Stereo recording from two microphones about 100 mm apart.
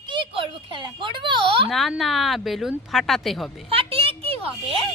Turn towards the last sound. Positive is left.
turn(degrees=-70)  # may be behind; listen again after turning